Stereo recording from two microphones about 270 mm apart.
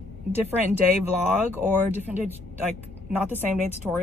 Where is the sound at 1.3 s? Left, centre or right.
Centre.